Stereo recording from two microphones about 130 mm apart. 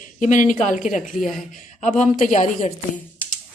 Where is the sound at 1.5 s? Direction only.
70° left (ahead or behind).